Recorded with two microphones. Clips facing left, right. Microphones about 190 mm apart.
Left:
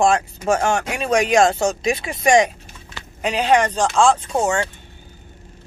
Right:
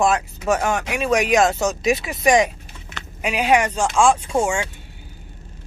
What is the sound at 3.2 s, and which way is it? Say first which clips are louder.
Speech: left 1 dB; 10° right (ahead or behind).